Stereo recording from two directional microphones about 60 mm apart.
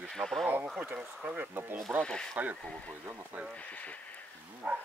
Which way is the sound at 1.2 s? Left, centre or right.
Right.